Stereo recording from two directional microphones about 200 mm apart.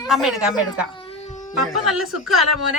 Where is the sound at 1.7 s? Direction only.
Centre (ahead or behind).